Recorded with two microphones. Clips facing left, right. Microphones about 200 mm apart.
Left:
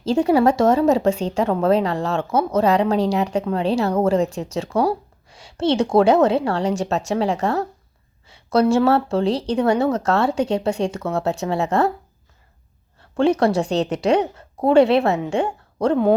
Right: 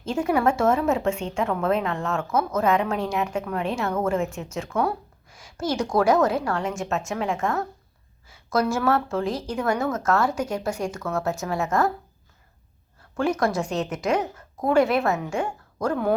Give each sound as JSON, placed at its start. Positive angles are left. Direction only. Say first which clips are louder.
{"t": 0.1, "sound": "a woman's voice", "louder": "left 6 dB", "side_deg": 30}
{"t": 13.0, "sound": "a woman's voice", "louder": "left 6 dB", "side_deg": 30}